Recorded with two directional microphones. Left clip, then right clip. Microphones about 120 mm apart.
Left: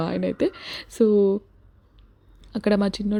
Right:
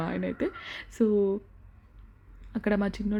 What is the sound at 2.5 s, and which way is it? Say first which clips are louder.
Speech: left 6 dB; 40° left (ahead or behind).